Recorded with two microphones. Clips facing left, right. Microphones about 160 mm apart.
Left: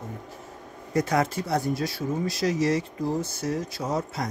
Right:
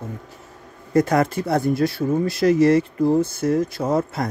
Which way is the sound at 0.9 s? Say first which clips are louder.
Right 6 dB; 55° right (ahead or behind).